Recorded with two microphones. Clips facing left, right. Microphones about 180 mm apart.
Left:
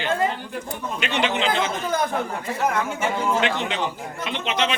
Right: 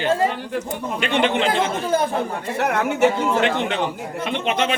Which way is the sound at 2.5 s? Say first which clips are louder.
Right 5 dB; 70° right (ahead or behind).